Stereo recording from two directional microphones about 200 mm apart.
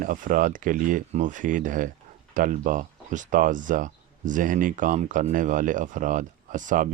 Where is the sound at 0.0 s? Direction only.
40° right (ahead or behind).